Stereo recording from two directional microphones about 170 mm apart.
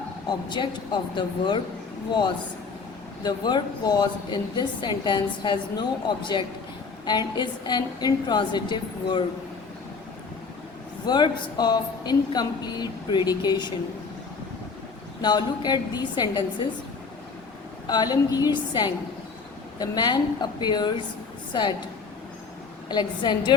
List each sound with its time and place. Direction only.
0.3 s a woman's voice: 25° left (ahead or behind)
3.2 s a woman's voice: 25° left (ahead or behind)
11.0 s a woman's voice: 25° left (ahead or behind)
15.2 s a woman's voice: 25° left (ahead or behind)
17.8 s a woman's voice: 25° left (ahead or behind)
22.9 s a woman's voice: 25° left (ahead or behind)